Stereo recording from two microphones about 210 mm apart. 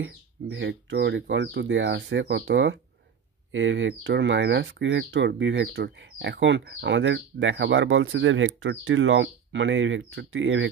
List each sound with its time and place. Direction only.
0.0 s speech: 60° right (ahead or behind)